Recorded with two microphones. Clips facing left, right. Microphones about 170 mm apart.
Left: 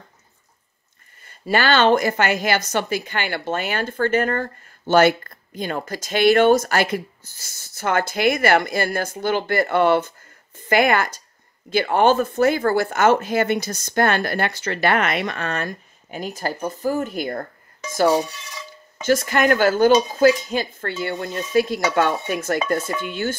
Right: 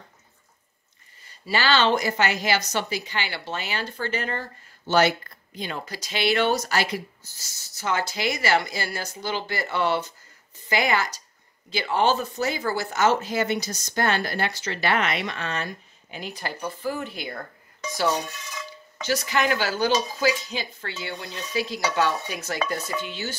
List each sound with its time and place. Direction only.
1.2 s a woman's voice: 55° left (ahead or behind)
19.0 s a woman's voice: 50° left (ahead or behind)